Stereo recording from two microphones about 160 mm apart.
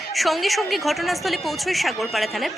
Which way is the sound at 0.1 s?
Centre (ahead or behind).